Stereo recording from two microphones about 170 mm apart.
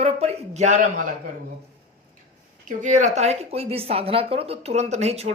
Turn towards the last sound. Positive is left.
turn(degrees=-40)  # may be behind; listen again after turning